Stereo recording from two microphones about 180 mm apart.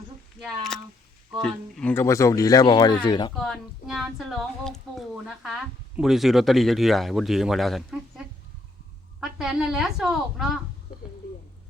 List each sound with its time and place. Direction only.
0.3 s speech: centre (ahead or behind); by 3.3 s 25° left (ahead or behind)
3.3 s speech: centre (ahead or behind)
9.2 s speech: 5° right (ahead or behind)